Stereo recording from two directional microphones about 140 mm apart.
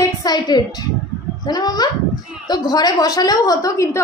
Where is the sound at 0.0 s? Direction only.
30° left (ahead or behind).